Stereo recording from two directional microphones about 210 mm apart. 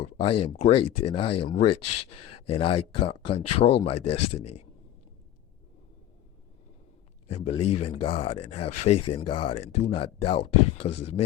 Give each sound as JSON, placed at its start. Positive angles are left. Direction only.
{"t": 0.2, "sound": "speech", "side_deg": 25}
{"t": 7.3, "sound": "speech", "side_deg": 30}